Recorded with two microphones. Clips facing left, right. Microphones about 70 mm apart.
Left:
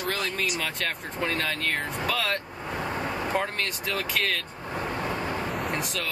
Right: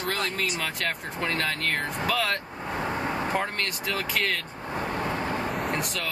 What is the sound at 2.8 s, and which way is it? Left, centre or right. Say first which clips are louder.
Speech: right 2 dB; centre.